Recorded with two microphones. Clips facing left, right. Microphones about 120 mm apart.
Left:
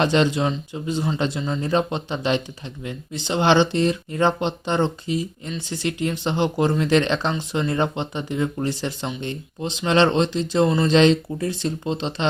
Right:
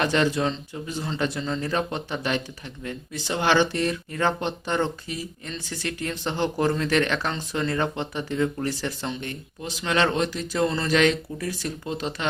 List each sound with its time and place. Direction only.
0.0 s speech: 20° left (ahead or behind)